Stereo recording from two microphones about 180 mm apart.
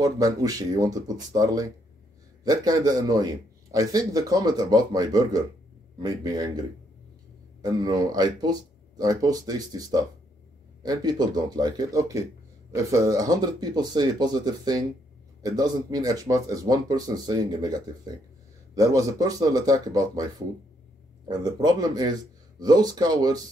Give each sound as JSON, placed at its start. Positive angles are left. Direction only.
{"t": 0.0, "sound": "a man's voice", "side_deg": -20}
{"t": 7.6, "sound": "a man's voice", "side_deg": -20}